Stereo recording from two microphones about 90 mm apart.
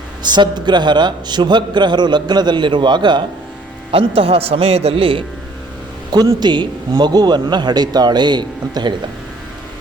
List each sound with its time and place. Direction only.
0.3 s a man's voice: 55° right (ahead or behind)
3.9 s a man's voice: 90° right
6.4 s a man's voice: 55° right (ahead or behind)